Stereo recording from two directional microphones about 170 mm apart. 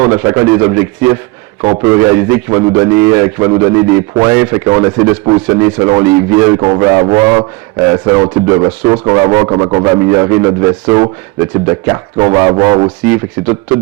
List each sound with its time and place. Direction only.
0.0 s a man's voice: 15° right (ahead or behind)